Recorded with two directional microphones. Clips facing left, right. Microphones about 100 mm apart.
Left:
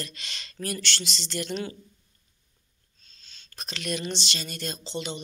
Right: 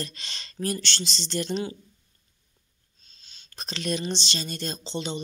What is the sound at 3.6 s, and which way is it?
Speech, 30° right (ahead or behind).